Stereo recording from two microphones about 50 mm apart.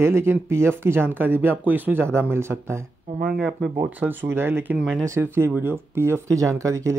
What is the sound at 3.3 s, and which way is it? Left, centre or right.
Speech, centre.